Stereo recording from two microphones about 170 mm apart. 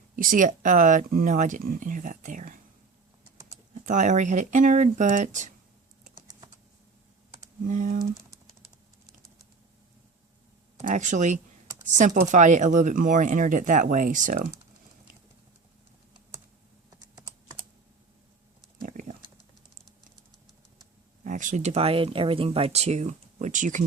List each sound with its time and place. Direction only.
0.2 s speech: 50° right (ahead or behind)
3.8 s speech: 45° right (ahead or behind)
7.7 s speech: 55° right (ahead or behind)
10.8 s speech: 45° right (ahead or behind)
18.8 s a sound: 50° right (ahead or behind)
21.2 s speech: 50° right (ahead or behind)